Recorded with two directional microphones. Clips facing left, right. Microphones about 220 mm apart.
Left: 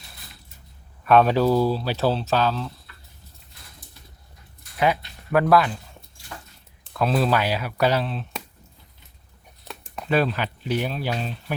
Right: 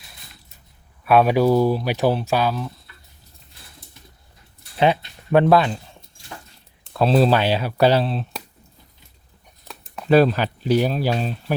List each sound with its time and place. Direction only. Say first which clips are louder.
1.0 s speech: right 2 dB; 10° right (ahead or behind)
4.8 s speech: right 4 dB; 25° right (ahead or behind)
6.9 s speech: right 5 dB; 30° right (ahead or behind)
10.1 s speech: right 7 dB; 35° right (ahead or behind)